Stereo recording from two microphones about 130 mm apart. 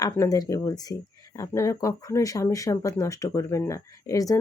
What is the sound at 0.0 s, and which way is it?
Speech, 25° left (ahead or behind).